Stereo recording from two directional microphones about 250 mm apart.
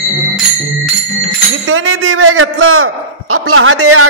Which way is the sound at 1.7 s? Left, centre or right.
Right.